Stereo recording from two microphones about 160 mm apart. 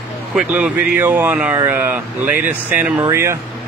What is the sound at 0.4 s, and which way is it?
Speech, 5° right (ahead or behind).